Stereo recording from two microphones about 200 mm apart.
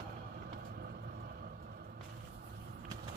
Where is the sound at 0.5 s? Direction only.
55° right (ahead or behind).